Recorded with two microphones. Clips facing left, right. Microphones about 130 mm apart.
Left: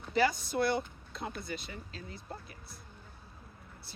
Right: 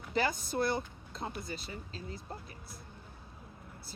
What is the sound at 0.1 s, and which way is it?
Speech, 45° right (ahead or behind).